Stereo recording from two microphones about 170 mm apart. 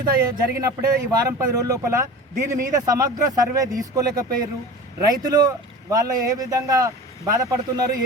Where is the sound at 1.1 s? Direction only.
20° right (ahead or behind).